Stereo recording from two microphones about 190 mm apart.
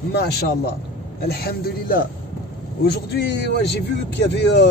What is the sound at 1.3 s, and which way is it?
Speech, 55° left (ahead or behind).